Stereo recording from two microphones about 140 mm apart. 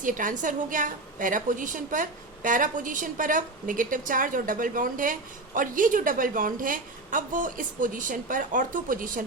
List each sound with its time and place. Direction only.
0.0 s a woman's voice: 70° right (ahead or behind)